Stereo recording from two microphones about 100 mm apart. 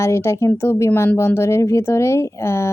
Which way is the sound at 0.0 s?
30° left (ahead or behind).